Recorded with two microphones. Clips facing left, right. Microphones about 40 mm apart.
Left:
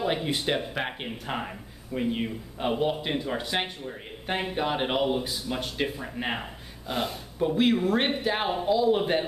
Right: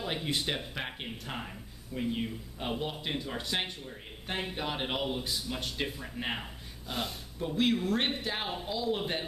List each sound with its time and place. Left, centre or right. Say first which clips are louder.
0.0 s speech: left 6 dB; centre